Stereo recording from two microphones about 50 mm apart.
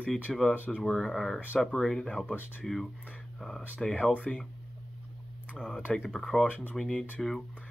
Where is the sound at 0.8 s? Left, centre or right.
Centre.